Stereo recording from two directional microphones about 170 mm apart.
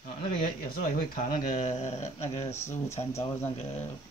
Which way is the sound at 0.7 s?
55° left (ahead or behind).